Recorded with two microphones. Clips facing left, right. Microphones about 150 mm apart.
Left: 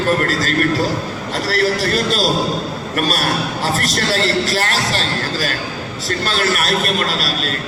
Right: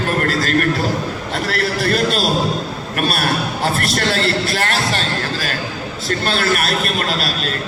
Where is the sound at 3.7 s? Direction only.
40° left (ahead or behind).